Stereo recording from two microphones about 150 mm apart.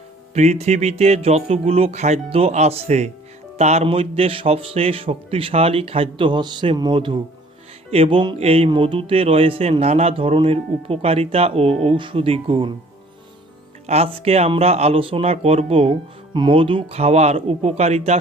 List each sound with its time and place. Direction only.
0.3 s a man's voice: 50° right (ahead or behind)
13.8 s a man's voice: 45° right (ahead or behind)